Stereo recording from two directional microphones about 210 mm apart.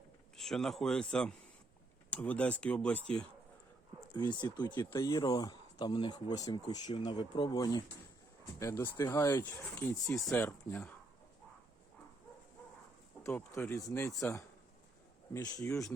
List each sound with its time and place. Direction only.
0.3 s speech: centre (ahead or behind)
4.1 s speech: 20° left (ahead or behind)
13.2 s speech: 10° left (ahead or behind)
15.3 s speech: 15° left (ahead or behind)